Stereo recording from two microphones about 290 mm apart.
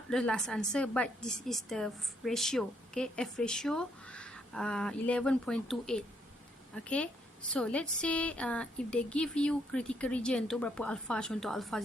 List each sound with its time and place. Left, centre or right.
0.1 s a woman's voice: centre